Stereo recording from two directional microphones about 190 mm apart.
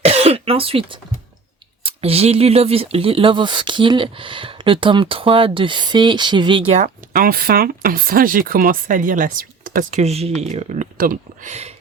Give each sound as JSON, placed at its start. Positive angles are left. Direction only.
{"t": 0.0, "sound": "cough", "side_deg": -30}
{"t": 1.8, "sound": "speech", "side_deg": -30}
{"t": 10.0, "sound": "speech", "side_deg": -35}